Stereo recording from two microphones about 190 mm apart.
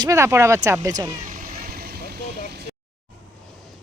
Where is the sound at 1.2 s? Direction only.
45° right (ahead or behind).